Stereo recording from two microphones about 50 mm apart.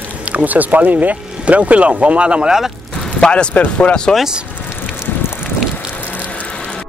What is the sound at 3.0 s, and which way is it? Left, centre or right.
Speech, centre.